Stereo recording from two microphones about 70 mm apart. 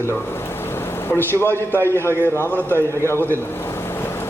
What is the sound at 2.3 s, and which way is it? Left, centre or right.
Speech, left.